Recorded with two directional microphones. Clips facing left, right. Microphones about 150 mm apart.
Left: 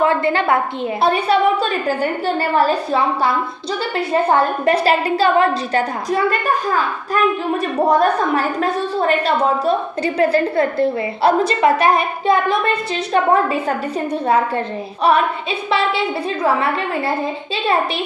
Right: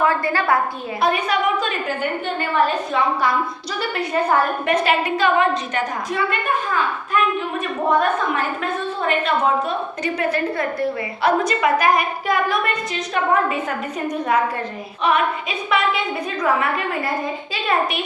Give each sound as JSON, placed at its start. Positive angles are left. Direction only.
{"t": 0.0, "sound": "a woman's voice", "side_deg": 25}